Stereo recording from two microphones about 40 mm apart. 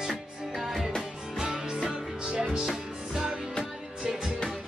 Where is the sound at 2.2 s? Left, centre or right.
Right.